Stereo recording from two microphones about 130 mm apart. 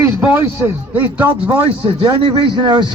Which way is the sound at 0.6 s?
10° right (ahead or behind).